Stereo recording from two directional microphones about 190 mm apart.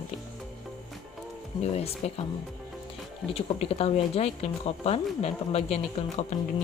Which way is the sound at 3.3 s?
30° left (ahead or behind).